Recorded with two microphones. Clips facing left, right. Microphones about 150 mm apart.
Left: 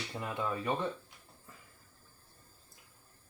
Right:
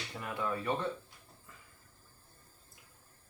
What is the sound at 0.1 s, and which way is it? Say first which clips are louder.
Speech: even; 20° left (ahead or behind).